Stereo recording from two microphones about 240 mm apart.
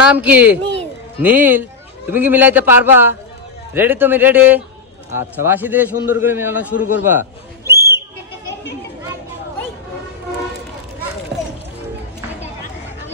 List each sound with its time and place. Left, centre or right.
0.1 s a man's voice: centre
7.1 s bird: centre